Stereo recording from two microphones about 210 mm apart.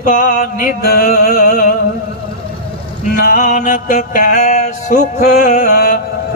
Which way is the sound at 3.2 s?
35° left (ahead or behind).